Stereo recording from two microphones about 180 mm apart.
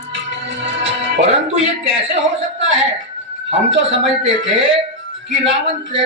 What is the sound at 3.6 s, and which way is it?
Speech, 90° right.